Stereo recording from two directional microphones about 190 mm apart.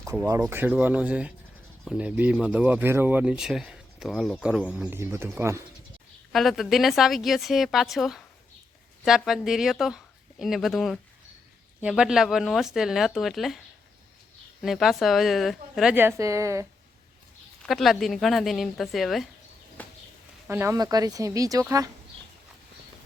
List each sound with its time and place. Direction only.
0.0 s speech: 15° right (ahead or behind)
6.3 s a woman's voice: centre (ahead or behind)
14.6 s a woman's voice: centre (ahead or behind); by 16.6 s 15° right (ahead or behind)
17.6 s a woman's voice: centre (ahead or behind)
19.8 s a sound: 10° left (ahead or behind)
20.5 s speech: 10° right (ahead or behind)